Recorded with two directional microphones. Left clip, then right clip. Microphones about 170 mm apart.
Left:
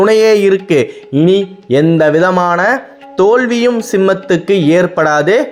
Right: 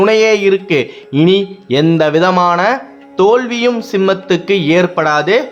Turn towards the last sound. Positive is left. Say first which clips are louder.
# left 2 dB
turn(degrees=15)  # may be behind; listen again after turning